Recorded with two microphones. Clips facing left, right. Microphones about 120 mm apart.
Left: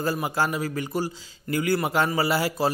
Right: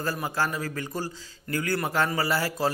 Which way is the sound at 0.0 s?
15° left (ahead or behind).